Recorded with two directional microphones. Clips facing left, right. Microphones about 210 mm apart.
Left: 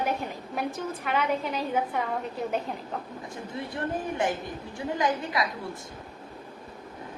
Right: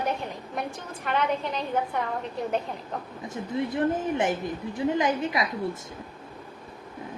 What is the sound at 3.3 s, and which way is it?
Speech, 20° right (ahead or behind).